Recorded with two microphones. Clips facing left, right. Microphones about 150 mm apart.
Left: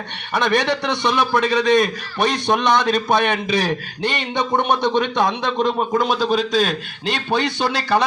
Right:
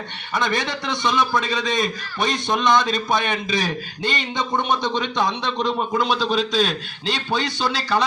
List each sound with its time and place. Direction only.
0.3 s a man's voice: 65° left (ahead or behind)